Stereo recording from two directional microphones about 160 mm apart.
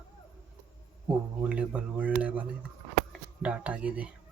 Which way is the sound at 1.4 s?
10° right (ahead or behind).